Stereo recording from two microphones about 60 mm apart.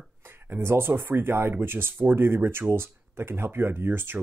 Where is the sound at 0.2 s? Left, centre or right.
Right.